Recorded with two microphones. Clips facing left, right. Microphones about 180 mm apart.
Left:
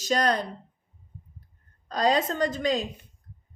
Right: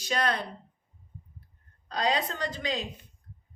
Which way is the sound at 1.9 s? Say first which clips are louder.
Left 5 dB; 45° left (ahead or behind).